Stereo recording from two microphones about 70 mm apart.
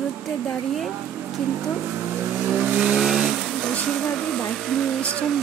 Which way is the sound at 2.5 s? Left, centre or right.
Centre.